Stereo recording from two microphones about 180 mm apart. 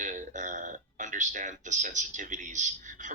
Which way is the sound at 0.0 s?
45° right (ahead or behind).